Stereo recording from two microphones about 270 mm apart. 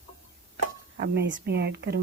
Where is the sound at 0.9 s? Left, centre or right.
Right.